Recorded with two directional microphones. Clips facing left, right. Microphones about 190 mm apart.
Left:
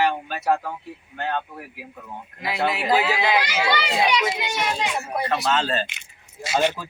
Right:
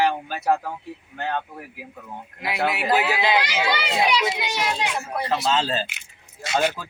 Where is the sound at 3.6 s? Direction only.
5° right (ahead or behind).